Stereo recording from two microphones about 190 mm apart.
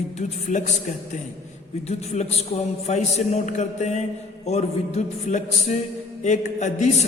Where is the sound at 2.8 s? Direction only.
35° left (ahead or behind).